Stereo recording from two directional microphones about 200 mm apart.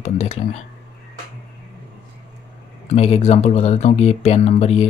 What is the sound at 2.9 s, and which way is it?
Speech, 30° left (ahead or behind).